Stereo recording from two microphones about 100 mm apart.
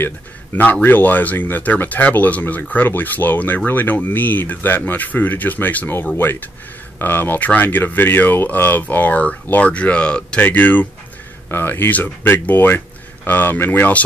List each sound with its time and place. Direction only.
0.6 s speech: 15° left (ahead or behind)